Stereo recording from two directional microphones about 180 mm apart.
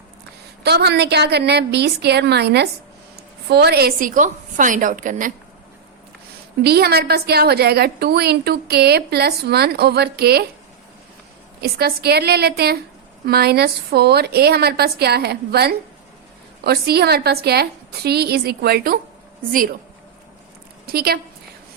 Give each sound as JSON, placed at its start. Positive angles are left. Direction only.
{"t": 0.6, "sound": "a woman's voice", "side_deg": -65}
{"t": 6.6, "sound": "a woman's voice", "side_deg": -60}
{"t": 11.6, "sound": "a woman's voice", "side_deg": -60}
{"t": 20.8, "sound": "speech", "side_deg": -60}